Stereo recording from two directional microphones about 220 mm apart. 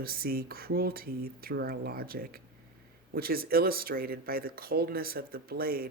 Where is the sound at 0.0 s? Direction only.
40° right (ahead or behind).